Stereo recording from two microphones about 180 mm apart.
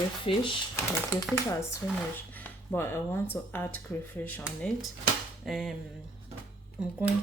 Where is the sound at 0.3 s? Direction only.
30° left (ahead or behind).